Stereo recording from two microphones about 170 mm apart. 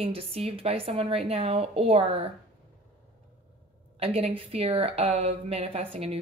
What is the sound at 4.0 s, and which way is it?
A woman's voice, 35° right (ahead or behind).